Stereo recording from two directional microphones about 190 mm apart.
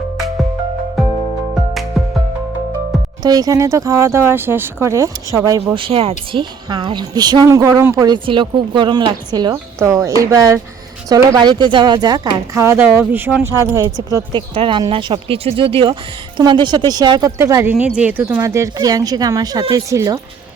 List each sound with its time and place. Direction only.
1.0 s music: centre (ahead or behind)
3.2 s speech: 20° right (ahead or behind)
18.3 s speech: 15° right (ahead or behind)